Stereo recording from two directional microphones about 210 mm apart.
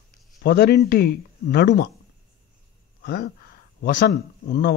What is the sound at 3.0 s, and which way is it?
Speech, 50° left (ahead or behind).